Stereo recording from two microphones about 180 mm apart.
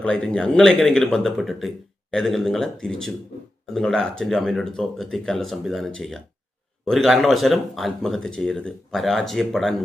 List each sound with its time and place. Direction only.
0.0 s speech: 5° left (ahead or behind)